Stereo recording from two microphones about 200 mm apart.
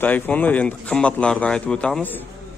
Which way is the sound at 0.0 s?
10° left (ahead or behind).